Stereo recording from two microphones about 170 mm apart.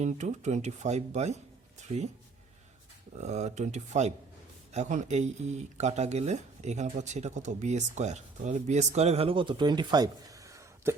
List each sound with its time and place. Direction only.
0.0 s speech: 45° right (ahead or behind)
3.2 s speech: 40° right (ahead or behind); by 10.9 s 20° right (ahead or behind)